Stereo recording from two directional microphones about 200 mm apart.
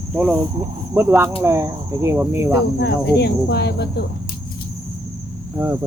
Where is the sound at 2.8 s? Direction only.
55° left (ahead or behind).